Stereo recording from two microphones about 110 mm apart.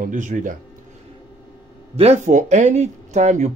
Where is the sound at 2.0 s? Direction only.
80° right.